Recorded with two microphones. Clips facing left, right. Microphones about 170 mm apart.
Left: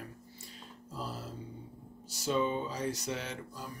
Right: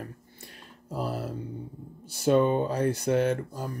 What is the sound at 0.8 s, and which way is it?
Speech, 65° right (ahead or behind).